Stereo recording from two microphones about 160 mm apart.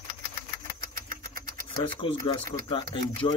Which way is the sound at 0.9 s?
60° right (ahead or behind).